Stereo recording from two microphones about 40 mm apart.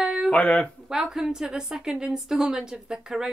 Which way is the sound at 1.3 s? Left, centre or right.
Centre.